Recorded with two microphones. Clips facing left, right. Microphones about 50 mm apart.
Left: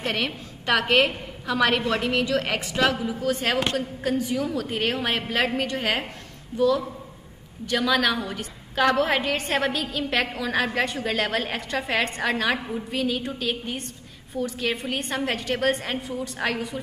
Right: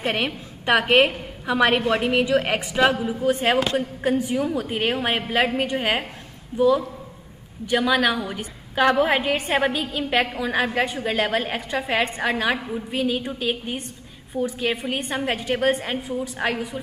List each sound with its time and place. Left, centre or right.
0.0 s a woman's voice: centre